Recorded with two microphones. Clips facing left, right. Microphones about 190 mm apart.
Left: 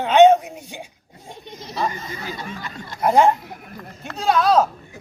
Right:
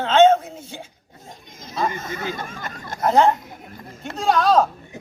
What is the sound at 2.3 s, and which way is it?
Speech, 50° right (ahead or behind).